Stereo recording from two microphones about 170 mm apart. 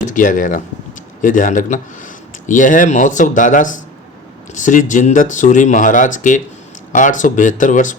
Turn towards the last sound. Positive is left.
turn(degrees=50)  # may be behind; listen again after turning